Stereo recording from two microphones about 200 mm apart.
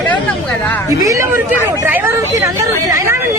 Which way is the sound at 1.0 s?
15° right (ahead or behind).